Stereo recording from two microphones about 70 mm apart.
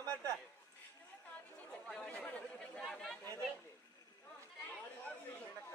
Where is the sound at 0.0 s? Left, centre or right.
Right.